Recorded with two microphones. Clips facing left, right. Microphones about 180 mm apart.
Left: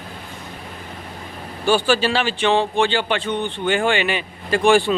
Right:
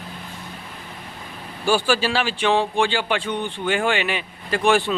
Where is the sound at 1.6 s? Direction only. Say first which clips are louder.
Left 2 dB; 5° right (ahead or behind).